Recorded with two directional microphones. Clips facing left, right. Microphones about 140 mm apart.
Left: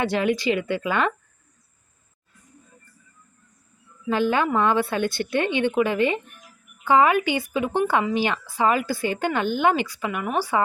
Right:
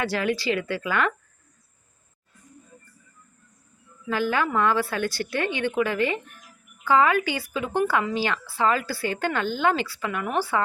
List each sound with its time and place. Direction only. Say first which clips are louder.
0.0 s a woman's voice: left 3 dB; 20° left (ahead or behind)
4.1 s a woman's voice: left 3 dB; 20° left (ahead or behind)